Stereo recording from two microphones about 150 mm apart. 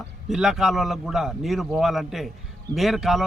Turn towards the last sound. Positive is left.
turn(degrees=0)  # may be behind; listen again after turning